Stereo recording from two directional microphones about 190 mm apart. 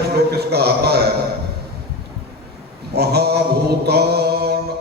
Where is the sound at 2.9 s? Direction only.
60° right (ahead or behind).